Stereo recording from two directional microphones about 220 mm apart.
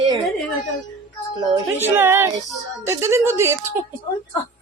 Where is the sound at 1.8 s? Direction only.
10° right (ahead or behind).